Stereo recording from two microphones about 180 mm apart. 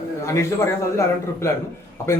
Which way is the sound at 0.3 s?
15° left (ahead or behind).